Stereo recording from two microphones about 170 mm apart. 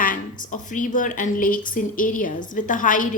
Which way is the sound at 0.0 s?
50° left (ahead or behind).